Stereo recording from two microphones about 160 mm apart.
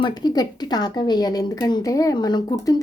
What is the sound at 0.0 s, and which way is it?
Speech, 25° left (ahead or behind).